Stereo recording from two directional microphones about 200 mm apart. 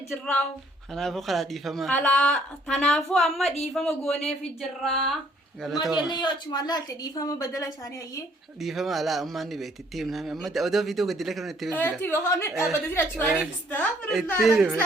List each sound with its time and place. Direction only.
0.1 s a woman's voice: 5° left (ahead or behind)
6.0 s a woman's voice: 20° left (ahead or behind)
8.6 s a woman's voice: centre (ahead or behind)